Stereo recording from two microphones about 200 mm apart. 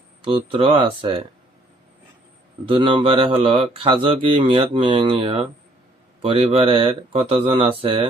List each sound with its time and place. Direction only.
0.2 s speech: 25° right (ahead or behind)
2.6 s speech: 25° right (ahead or behind)